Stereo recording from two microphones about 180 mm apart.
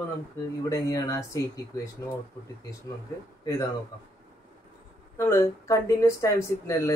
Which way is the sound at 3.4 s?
20° left (ahead or behind).